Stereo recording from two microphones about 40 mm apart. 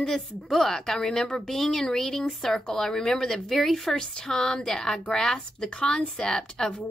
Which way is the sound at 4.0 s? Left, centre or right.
Centre.